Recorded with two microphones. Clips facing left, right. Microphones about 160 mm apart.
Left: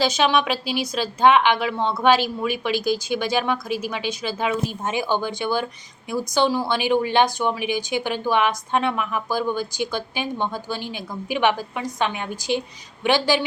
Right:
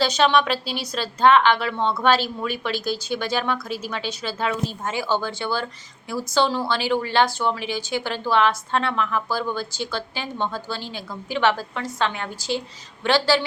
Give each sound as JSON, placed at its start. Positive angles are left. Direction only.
{"t": 0.0, "sound": "speech", "side_deg": 10}